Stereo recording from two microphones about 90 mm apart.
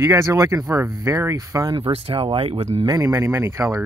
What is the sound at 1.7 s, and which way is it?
Speech, 70° right (ahead or behind).